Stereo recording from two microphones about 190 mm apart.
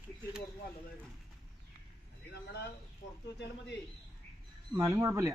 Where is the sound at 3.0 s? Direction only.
75° left (ahead or behind).